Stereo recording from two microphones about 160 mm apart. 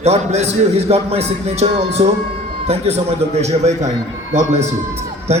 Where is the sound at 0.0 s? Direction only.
45° right (ahead or behind).